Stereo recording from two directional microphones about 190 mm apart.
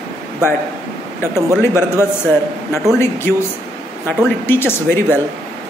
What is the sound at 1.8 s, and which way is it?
Speech, 15° left (ahead or behind).